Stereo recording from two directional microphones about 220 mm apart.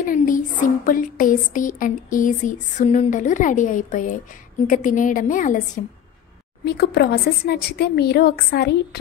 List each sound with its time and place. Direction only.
0.0 s speech: 40° left (ahead or behind)
6.6 s speech: 45° left (ahead or behind)